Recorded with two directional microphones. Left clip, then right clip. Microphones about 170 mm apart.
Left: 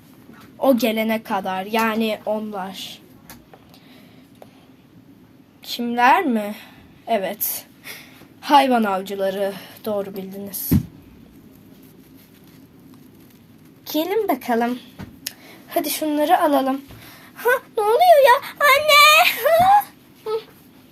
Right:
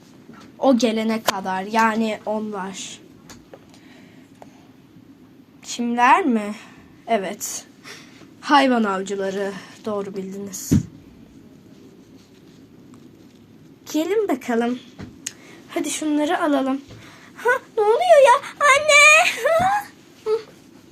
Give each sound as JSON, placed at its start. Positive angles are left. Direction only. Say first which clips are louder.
{"t": 0.6, "sound": "speech", "louder": "even", "side_deg": 10}
{"t": 5.6, "sound": "a woman's voice", "louder": "even", "side_deg": 10}
{"t": 13.8, "sound": "a woman's voice", "louder": "even", "side_deg": 20}
{"t": 15.9, "sound": "a woman's voice", "louder": "left 4 dB", "side_deg": 25}
{"t": 17.3, "sound": "a sound", "louder": "even", "side_deg": 20}